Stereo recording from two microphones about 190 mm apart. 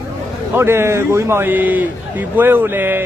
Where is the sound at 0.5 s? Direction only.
10° right (ahead or behind).